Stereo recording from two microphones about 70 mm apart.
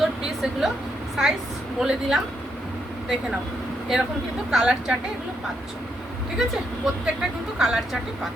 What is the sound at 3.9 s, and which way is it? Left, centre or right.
Speech, centre.